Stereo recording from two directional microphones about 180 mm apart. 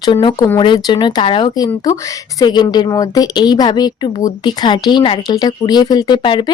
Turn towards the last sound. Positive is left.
turn(degrees=25)  # may be behind; listen again after turning